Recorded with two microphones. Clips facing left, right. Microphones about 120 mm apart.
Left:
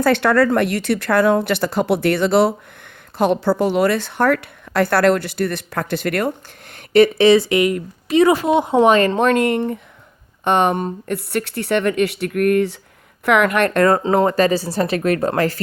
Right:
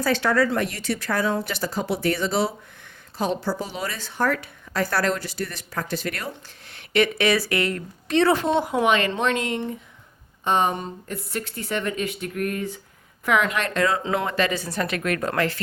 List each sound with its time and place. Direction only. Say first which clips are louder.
0.0 s a woman's voice: left 6 dB; 60° left (ahead or behind); by 8.6 s 10° left (ahead or behind)
8.6 s speech: left 8 dB; 25° left (ahead or behind)
8.9 s a woman's voice: left 7 dB; 40° left (ahead or behind)
14.0 s speech: left 8 dB; 40° left (ahead or behind)